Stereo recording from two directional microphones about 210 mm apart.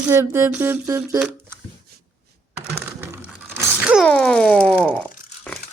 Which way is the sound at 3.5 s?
5° right (ahead or behind).